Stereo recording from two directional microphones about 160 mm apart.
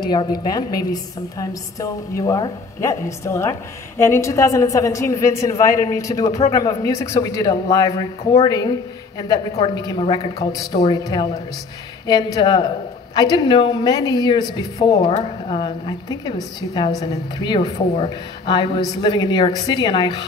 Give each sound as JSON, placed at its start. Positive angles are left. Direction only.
{"t": 0.0, "sound": "a woman's voice", "side_deg": 25}
{"t": 15.0, "sound": "a woman's voice", "side_deg": 35}